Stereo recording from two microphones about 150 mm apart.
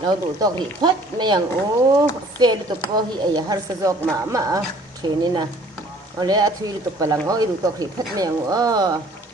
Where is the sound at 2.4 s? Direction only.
30° right (ahead or behind).